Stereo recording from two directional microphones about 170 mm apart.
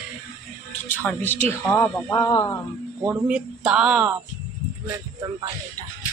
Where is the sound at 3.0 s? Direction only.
10° right (ahead or behind).